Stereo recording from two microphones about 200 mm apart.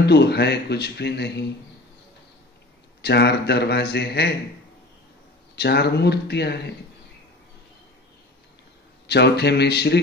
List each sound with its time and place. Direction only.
0.0 s speech: 55° left (ahead or behind)
3.0 s speech: 55° left (ahead or behind)
5.6 s speech: 55° left (ahead or behind)
9.0 s speech: 55° left (ahead or behind)